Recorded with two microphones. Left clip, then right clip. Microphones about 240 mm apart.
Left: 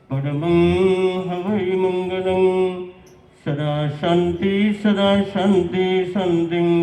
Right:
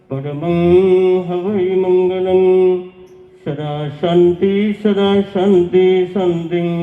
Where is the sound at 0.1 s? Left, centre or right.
Left.